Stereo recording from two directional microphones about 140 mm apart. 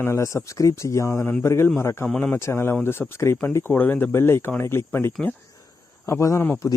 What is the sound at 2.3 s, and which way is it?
Speech, 20° left (ahead or behind).